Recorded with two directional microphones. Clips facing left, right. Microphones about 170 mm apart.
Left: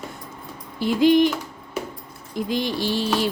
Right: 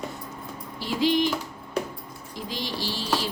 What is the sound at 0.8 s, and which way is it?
Speech, 55° left (ahead or behind).